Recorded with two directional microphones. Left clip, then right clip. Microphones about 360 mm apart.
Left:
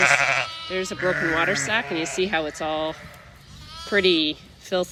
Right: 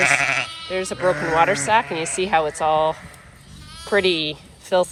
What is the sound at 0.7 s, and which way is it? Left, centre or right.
Sheep, centre.